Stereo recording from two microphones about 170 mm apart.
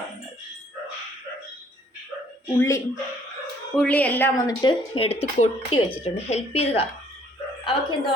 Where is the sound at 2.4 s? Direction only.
15° left (ahead or behind).